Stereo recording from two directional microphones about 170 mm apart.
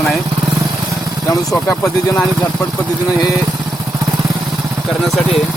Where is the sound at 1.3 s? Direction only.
20° left (ahead or behind).